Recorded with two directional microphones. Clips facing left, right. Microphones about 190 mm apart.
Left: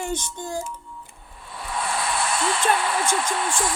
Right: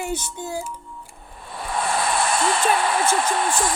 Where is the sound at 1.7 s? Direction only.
50° right (ahead or behind).